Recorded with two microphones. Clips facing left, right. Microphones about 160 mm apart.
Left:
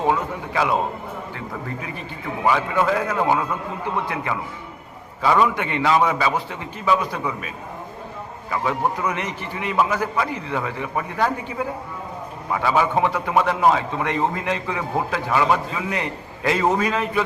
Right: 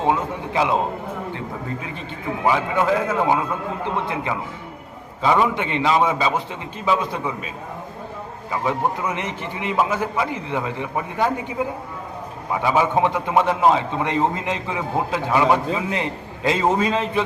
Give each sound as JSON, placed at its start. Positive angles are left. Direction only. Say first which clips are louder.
{"t": 0.0, "sound": "a man's voice", "louder": "right 1 dB", "side_deg": -20}
{"t": 2.4, "sound": "a man's voice", "louder": "even", "side_deg": -20}
{"t": 12.6, "sound": "a man's voice", "louder": "right 1 dB", "side_deg": -20}